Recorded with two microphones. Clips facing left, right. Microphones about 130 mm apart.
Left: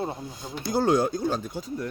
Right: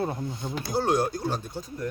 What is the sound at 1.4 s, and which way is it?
Speech, 90° left.